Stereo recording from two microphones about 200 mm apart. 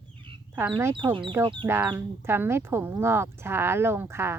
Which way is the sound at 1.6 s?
10° right (ahead or behind).